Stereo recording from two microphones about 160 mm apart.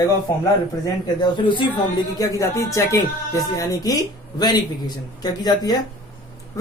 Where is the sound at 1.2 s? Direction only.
30° left (ahead or behind).